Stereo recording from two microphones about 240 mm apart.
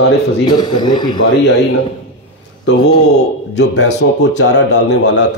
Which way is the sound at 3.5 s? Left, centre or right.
Left.